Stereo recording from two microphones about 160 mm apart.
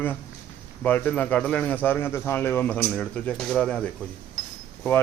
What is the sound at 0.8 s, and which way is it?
A man's voice, 10° left (ahead or behind).